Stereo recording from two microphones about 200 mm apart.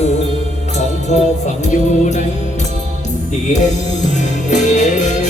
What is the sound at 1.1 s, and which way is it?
Music, 35° left (ahead or behind).